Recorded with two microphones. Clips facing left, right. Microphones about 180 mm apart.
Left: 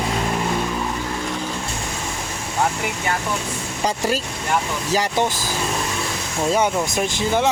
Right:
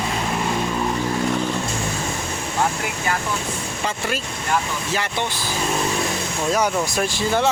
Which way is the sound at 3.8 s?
40° left (ahead or behind).